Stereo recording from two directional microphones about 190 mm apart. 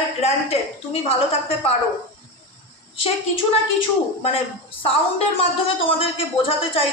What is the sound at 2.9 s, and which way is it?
Speech, 30° left (ahead or behind).